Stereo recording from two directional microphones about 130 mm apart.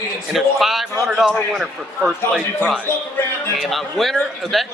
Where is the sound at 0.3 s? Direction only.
Centre (ahead or behind).